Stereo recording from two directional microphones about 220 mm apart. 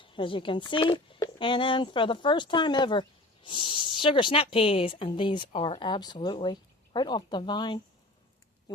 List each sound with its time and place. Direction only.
0.0 s speech: 25° left (ahead or behind)